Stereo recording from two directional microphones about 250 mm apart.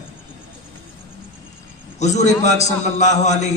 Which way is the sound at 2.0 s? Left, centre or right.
Left.